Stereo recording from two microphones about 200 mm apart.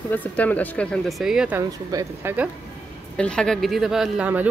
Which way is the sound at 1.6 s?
15° right (ahead or behind).